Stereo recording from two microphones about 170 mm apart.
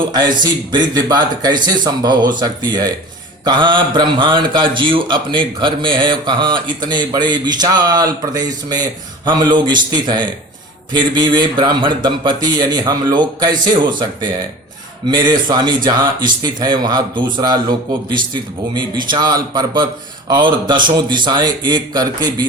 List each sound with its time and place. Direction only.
0.0 s a man's voice: 25° right (ahead or behind)